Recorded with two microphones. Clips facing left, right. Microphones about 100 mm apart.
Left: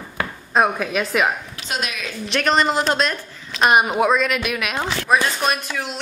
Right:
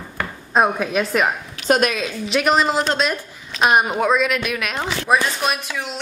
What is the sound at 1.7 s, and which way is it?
Speech, 50° right (ahead or behind).